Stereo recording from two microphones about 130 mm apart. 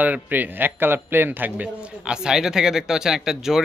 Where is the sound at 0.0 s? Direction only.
15° right (ahead or behind).